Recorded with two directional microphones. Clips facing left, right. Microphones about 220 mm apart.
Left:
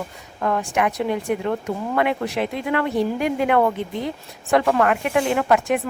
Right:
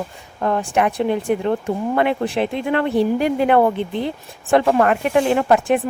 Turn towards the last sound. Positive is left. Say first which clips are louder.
# right 3 dB
turn(degrees=-30)  # may be behind; listen again after turning